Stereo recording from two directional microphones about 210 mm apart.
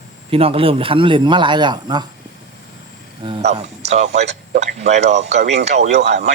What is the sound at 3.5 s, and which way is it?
Speech, 30° right (ahead or behind).